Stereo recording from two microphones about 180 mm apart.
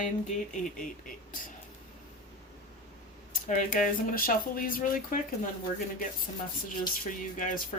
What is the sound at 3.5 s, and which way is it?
Speech, 50° left (ahead or behind).